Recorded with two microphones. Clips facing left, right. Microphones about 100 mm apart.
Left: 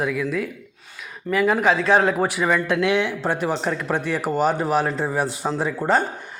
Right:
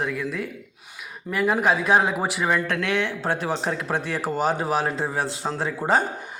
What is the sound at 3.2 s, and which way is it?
A man's voice, centre (ahead or behind).